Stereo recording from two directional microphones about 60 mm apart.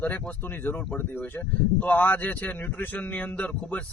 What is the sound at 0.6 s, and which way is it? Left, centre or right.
A man's voice, left.